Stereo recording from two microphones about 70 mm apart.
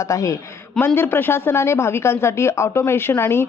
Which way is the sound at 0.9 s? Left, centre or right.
Left.